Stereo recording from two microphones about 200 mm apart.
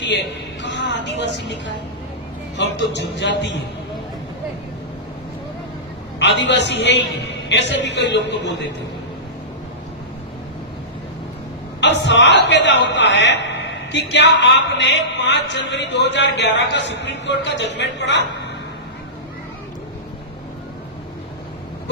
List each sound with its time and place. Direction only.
0.0 s a woman's voice: 60° left (ahead or behind)
6.1 s a man's voice: 60° left (ahead or behind)
11.8 s a man's voice: 60° left (ahead or behind)